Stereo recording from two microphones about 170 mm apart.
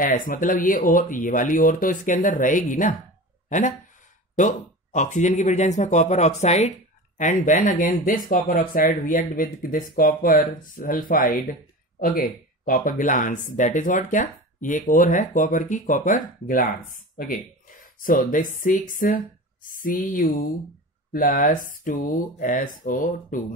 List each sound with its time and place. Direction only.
0.0 s speech: 55° left (ahead or behind)